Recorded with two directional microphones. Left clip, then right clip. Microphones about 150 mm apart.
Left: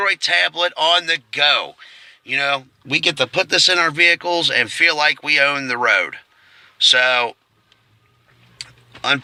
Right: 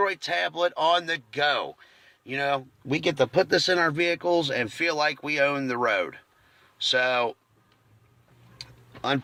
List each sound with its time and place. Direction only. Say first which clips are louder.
0.0 s speech: left 9 dB; 30° right (ahead or behind)
2.8 s speech: left 7 dB; 40° right (ahead or behind)
8.9 s tick-tock: left 9 dB; 25° right (ahead or behind)